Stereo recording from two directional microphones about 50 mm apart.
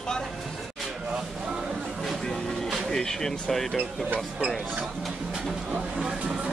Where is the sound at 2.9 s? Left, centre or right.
Centre.